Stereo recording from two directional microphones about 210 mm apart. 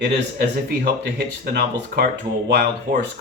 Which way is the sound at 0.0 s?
50° right (ahead or behind).